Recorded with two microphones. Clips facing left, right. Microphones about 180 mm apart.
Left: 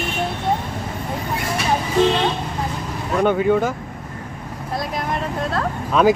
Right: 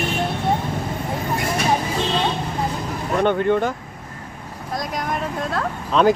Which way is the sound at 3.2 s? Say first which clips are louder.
Left 2 dB; 5° left (ahead or behind).